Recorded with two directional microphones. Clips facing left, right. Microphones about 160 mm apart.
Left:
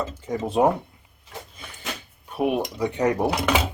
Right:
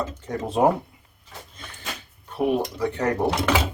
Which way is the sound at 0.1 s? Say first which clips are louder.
Left 2 dB; centre (ahead or behind).